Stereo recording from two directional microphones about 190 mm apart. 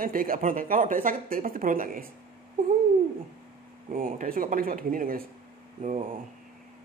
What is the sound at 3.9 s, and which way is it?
Speech, 45° right (ahead or behind).